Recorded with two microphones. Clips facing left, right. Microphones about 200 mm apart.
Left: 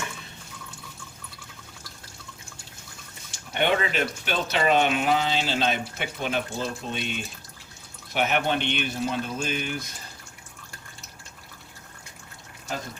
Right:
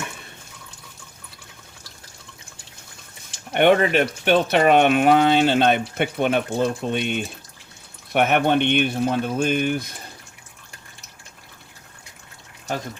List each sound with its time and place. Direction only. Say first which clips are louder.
3.5 s speech: right 8 dB; 60° right (ahead or behind)